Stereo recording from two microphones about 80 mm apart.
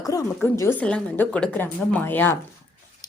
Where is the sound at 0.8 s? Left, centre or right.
Centre.